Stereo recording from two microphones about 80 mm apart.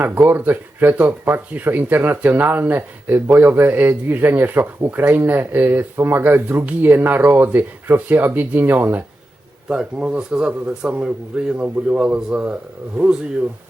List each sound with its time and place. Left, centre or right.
0.0 s speech: right
9.6 s a man's voice: centre